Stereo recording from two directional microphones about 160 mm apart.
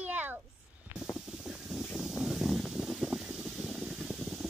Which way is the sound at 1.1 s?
5° right (ahead or behind).